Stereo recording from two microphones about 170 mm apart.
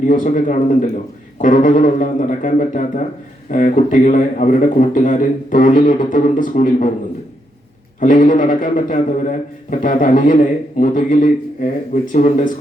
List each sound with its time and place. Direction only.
0.0 s a man's voice: 50° left (ahead or behind)
7.9 s a man's voice: 50° left (ahead or behind)